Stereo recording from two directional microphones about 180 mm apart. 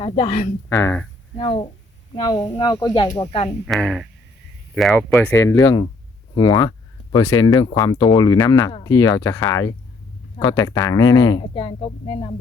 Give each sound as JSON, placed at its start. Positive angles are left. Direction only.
{"t": 0.0, "sound": "speech", "side_deg": 25}
{"t": 0.7, "sound": "speech", "side_deg": 10}
{"t": 1.4, "sound": "speech", "side_deg": 30}
{"t": 3.7, "sound": "speech", "side_deg": 5}
{"t": 10.5, "sound": "speech", "side_deg": 25}